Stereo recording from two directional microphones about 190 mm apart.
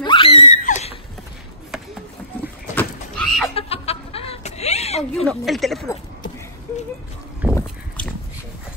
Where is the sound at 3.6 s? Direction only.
30° left (ahead or behind).